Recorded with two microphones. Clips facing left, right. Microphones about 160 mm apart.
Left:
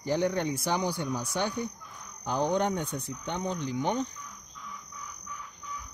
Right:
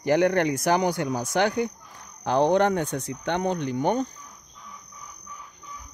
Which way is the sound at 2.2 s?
80° right.